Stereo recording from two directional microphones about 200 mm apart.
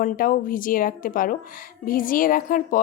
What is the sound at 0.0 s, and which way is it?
A woman's voice, 45° left (ahead or behind).